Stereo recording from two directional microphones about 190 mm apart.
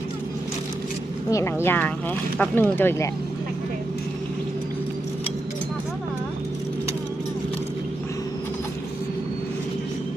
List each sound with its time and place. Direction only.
1.3 s speech: 15° left (ahead or behind)